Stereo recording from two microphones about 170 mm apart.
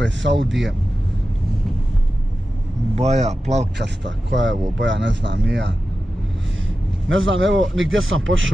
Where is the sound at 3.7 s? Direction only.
90° right.